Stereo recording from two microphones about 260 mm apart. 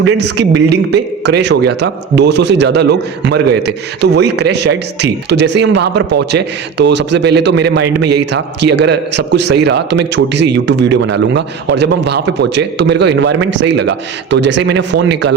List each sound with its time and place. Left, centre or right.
0.0 s a man's voice: right